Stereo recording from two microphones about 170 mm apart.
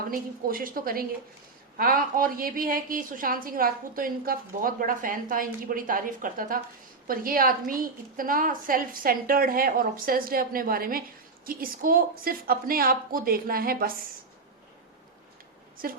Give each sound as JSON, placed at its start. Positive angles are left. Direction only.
{"t": 0.4, "sound": "a woman's voice", "side_deg": -55}